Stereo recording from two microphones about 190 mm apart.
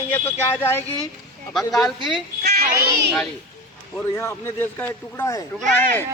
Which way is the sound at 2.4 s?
55° right (ahead or behind).